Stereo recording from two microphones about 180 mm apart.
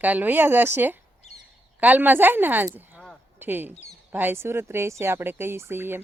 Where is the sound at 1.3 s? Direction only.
40° left (ahead or behind).